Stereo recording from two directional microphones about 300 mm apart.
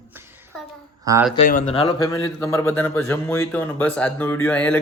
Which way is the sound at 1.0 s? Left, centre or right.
Centre.